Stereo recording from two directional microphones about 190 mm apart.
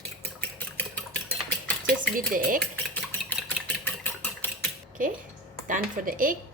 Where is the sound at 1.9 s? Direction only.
45° right (ahead or behind).